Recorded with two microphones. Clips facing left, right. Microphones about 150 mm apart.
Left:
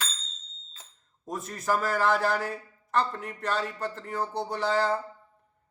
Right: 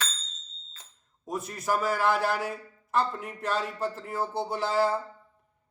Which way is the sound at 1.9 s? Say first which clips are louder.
Left 1 dB; centre (ahead or behind).